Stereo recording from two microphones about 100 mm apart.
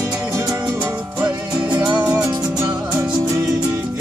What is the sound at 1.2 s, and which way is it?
Music, 15° right (ahead or behind).